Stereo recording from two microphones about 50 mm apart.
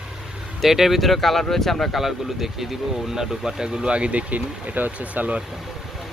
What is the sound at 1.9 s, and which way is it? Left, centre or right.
Speech, centre.